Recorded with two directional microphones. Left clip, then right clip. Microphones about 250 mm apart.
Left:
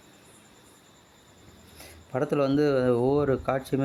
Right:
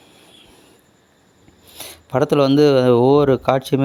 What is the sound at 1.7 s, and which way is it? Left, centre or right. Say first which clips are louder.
Speech: right 11 dB; right.